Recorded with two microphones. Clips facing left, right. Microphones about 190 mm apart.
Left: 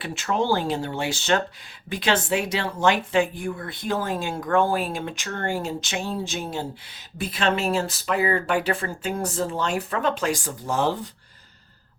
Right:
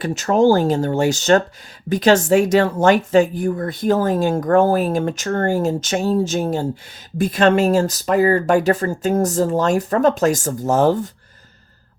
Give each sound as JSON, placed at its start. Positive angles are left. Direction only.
{"t": 0.0, "sound": "speech", "side_deg": -45}